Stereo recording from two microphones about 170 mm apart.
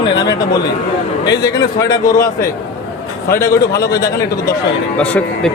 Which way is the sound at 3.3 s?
20° left (ahead or behind).